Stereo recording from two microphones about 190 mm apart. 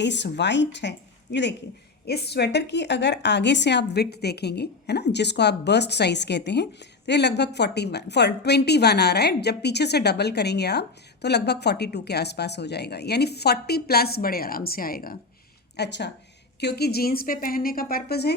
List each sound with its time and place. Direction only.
0.0 s a woman's voice: 65° left (ahead or behind); by 15.2 s 50° left (ahead or behind)
15.7 s a woman's voice: 65° left (ahead or behind)